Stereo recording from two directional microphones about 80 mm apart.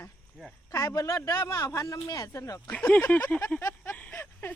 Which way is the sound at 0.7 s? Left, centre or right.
Left.